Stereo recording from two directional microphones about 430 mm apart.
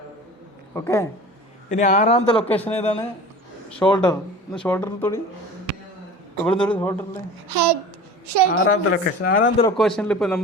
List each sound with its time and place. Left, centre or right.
0.7 s speech: centre
1.7 s speech: centre
3.8 s speech: centre
6.4 s speech: centre
7.4 s a child's voice: right
8.4 s speech: centre
9.6 s speech: centre